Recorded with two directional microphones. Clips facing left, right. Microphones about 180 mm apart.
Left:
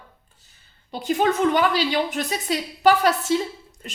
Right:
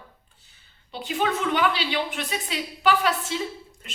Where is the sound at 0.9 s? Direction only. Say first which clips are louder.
Left 5 dB; 40° left (ahead or behind).